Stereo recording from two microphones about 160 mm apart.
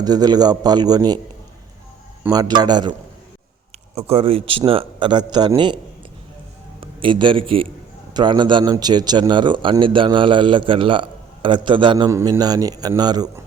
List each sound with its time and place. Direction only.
0.0 s a man's voice: 25° right (ahead or behind)
2.3 s a man's voice: 25° right (ahead or behind)
3.9 s a man's voice: 40° right (ahead or behind)
12.0 s a man's voice: 20° right (ahead or behind)